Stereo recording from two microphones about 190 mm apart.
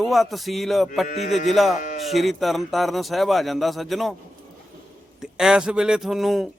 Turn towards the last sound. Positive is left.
turn(degrees=0)  # may be behind; listen again after turning